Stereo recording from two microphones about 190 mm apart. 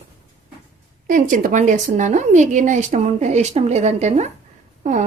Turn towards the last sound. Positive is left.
turn(degrees=-40)  # may be behind; listen again after turning